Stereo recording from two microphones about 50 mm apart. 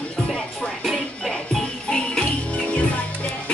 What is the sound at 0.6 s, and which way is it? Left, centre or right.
Music, centre.